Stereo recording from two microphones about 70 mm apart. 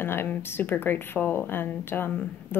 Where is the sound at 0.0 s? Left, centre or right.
Left.